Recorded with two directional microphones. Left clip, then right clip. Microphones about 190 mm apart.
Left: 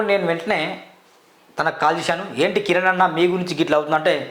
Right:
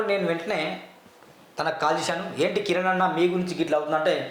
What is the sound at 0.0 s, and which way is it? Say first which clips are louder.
Speech: left 5 dB; 35° left (ahead or behind).